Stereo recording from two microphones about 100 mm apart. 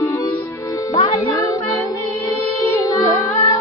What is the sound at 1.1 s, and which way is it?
Music, 35° left (ahead or behind).